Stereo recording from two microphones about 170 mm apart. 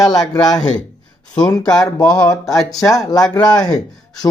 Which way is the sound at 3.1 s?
20° left (ahead or behind).